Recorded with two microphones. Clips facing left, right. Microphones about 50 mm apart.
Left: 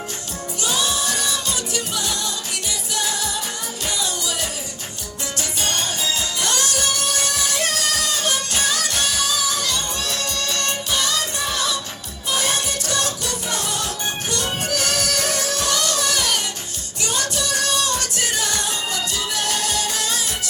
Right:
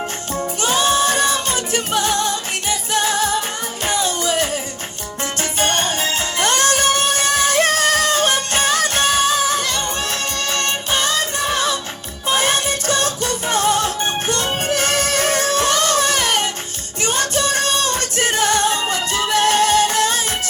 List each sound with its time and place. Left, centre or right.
0.6 s music: right